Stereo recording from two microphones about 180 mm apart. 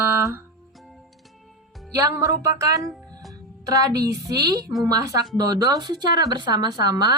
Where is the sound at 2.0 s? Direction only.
20° right (ahead or behind).